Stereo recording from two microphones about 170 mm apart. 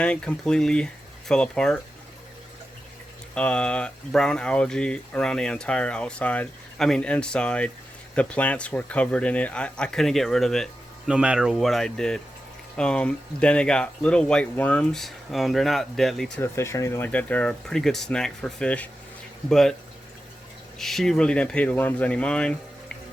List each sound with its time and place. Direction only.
0.0 s speech: 5° left (ahead or behind)
3.3 s speech: 5° left (ahead or behind)
16.4 s speech: 15° left (ahead or behind)
20.7 s speech: centre (ahead or behind)